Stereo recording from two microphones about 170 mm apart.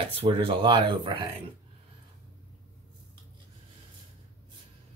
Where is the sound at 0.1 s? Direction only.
35° right (ahead or behind).